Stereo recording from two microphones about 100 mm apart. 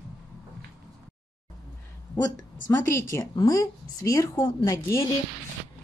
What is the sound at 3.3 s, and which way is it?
A woman's voice, 40° left (ahead or behind).